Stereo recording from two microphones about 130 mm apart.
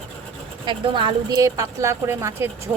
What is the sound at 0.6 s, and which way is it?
A woman's voice, 40° right (ahead or behind).